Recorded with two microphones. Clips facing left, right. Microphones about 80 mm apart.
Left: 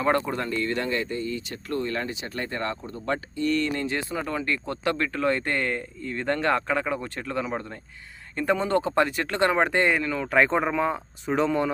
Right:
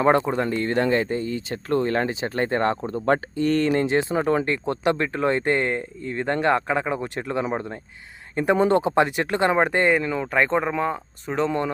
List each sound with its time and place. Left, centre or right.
0.0 s speech: right
0.4 s speech: right; by 10.2 s centre
10.3 s speech: centre